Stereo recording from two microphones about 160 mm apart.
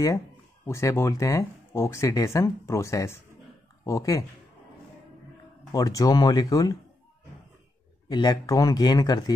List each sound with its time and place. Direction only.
0.7 s speech: 15° left (ahead or behind)
5.7 s speech: 20° left (ahead or behind)
8.1 s speech: 25° left (ahead or behind)